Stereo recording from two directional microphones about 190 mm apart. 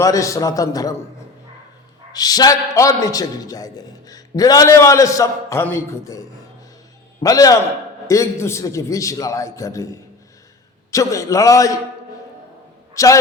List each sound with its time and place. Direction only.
0.0 s a man's voice: 15° left (ahead or behind)
2.1 s a man's voice: 20° left (ahead or behind)
12.9 s speech: 15° left (ahead or behind)